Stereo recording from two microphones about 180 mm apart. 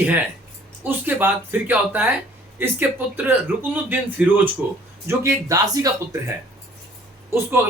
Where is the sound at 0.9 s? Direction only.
10° right (ahead or behind).